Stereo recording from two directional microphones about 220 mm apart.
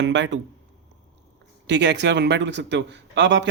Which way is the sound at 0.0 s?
55° right (ahead or behind).